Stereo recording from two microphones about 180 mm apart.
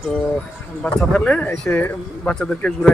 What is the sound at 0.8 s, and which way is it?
Speech, 5° left (ahead or behind).